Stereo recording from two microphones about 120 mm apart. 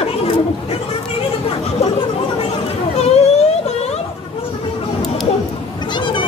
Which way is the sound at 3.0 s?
65° left (ahead or behind).